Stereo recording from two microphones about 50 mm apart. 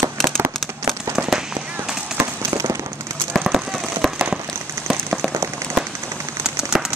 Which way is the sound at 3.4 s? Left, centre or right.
Centre.